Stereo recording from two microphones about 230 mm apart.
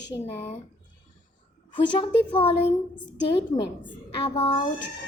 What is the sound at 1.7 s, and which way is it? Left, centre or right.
A woman's voice, left.